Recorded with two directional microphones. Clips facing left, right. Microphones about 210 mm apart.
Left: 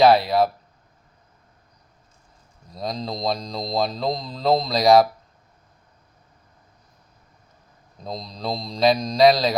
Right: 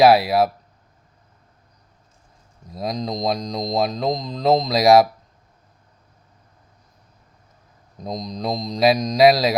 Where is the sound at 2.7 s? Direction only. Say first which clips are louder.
Right 2 dB; centre (ahead or behind).